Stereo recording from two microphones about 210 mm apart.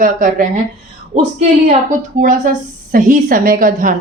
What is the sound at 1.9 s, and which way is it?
A woman's voice, 40° right (ahead or behind).